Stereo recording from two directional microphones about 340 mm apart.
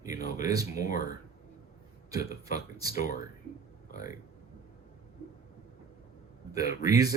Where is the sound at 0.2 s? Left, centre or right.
Left.